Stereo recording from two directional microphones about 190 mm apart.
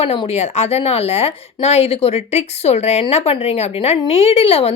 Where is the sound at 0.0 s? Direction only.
30° left (ahead or behind).